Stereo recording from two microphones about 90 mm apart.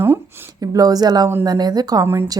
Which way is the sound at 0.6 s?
40° right (ahead or behind).